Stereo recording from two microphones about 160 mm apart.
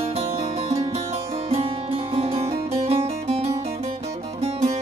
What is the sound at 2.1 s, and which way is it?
Harpsichord, 40° right (ahead or behind).